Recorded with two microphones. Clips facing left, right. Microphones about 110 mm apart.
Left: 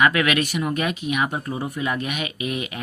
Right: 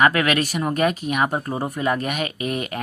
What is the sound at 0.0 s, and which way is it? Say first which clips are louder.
Speech: right 1 dB; 40° right (ahead or behind).